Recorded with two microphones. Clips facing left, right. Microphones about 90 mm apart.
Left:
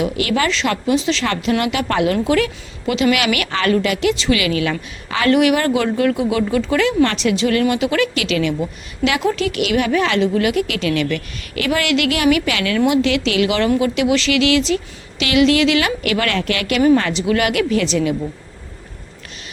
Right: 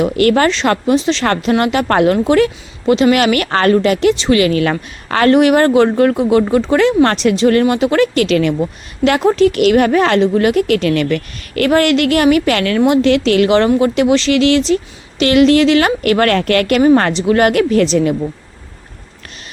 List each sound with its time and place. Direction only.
0.0 s a woman's voice: 45° right (ahead or behind)